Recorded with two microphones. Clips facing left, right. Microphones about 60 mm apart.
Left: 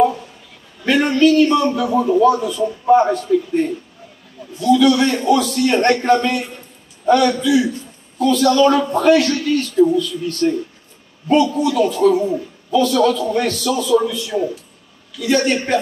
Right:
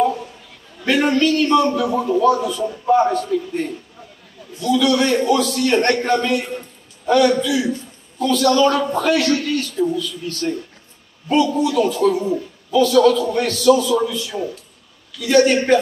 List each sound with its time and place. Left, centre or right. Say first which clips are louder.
0.8 s a man's voice: left 3 dB; centre